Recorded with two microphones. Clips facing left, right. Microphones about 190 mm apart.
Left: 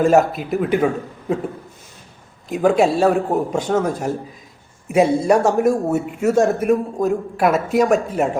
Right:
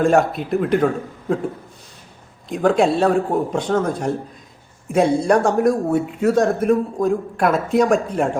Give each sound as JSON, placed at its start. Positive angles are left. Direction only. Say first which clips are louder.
{"t": 0.0, "sound": "a man's voice", "louder": "left 1 dB", "side_deg": 5}
{"t": 2.5, "sound": "a man's voice", "louder": "left 1 dB", "side_deg": 5}